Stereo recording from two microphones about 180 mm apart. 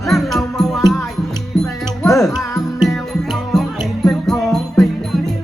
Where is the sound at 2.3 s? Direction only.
20° left (ahead or behind).